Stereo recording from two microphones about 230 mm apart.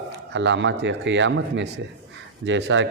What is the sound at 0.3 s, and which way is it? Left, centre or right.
Speech, right.